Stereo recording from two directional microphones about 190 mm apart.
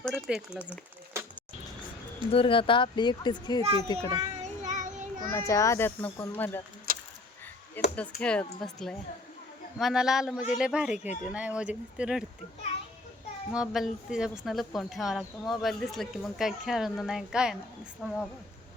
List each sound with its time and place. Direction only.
0.0 s a sound: centre (ahead or behind)
2.3 s speech: 30° left (ahead or behind)
4.1 s child singing: 35° right (ahead or behind)
5.3 s speech: 15° left (ahead or behind)
6.9 s a sound: 50° right (ahead or behind)
7.9 s speech: 5° left (ahead or behind)
13.5 s speech: centre (ahead or behind)